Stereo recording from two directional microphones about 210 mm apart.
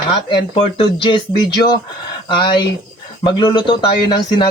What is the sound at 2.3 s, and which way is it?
A man's voice, 20° left (ahead or behind).